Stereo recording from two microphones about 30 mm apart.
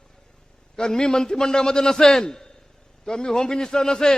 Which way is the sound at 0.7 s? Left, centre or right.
Left.